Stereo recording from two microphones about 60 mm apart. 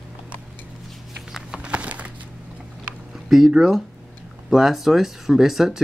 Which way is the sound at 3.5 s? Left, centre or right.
Centre.